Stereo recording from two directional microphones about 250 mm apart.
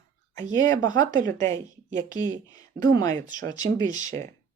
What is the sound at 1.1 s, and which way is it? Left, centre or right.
Speech, right.